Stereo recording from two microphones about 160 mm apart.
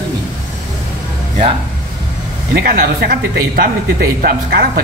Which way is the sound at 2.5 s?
65° right (ahead or behind).